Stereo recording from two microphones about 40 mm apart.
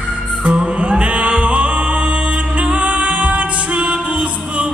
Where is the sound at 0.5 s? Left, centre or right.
Centre.